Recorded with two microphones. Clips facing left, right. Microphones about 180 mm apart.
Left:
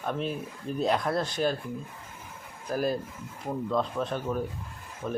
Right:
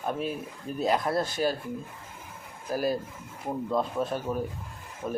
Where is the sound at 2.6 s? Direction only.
5° right (ahead or behind).